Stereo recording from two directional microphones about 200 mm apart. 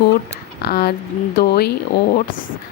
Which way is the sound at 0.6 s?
50° left (ahead or behind).